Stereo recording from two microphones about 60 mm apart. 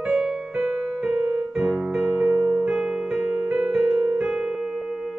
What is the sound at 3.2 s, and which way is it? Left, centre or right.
Music, right.